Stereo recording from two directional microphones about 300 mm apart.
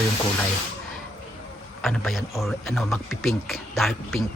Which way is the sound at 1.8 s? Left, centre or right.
Centre.